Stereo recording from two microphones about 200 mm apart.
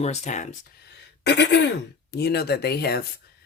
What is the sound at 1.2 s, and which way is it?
Speech, 60° left (ahead or behind).